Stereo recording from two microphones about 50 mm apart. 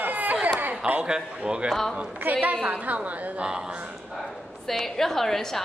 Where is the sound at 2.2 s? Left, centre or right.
Right.